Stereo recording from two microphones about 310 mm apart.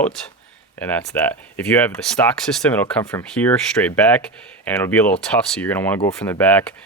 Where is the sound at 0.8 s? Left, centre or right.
Centre.